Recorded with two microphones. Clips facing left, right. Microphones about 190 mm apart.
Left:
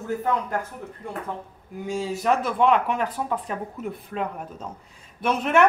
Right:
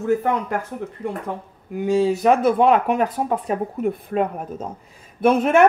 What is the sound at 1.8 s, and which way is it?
A woman's voice, 65° right (ahead or behind).